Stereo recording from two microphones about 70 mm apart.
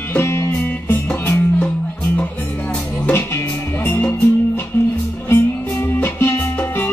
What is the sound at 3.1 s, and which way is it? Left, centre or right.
Music, left.